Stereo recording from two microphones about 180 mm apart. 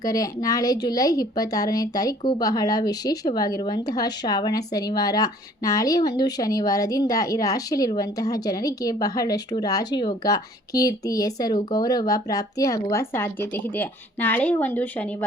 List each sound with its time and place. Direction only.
0.0 s a woman's voice: 20° left (ahead or behind)